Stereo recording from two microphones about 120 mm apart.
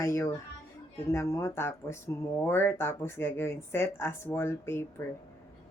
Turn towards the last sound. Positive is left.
turn(degrees=20)  # may be behind; listen again after turning